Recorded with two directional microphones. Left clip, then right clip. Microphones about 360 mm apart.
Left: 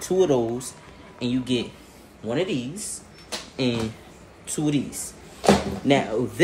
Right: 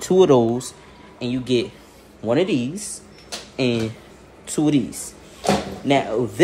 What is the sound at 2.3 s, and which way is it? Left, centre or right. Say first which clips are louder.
Speech: right 6 dB; centre.